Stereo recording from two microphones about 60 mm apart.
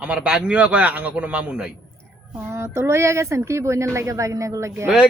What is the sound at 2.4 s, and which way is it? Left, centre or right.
Speech, right.